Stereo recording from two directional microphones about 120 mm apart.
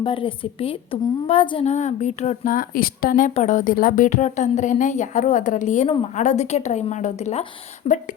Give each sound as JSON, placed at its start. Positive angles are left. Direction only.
{"t": 0.0, "sound": "a woman's voice", "side_deg": 45}
{"t": 1.7, "sound": "a woman's voice", "side_deg": 75}
{"t": 3.2, "sound": "a woman's voice", "side_deg": 85}
{"t": 6.1, "sound": "a woman's voice", "side_deg": 80}
{"t": 7.9, "sound": "speech", "side_deg": 55}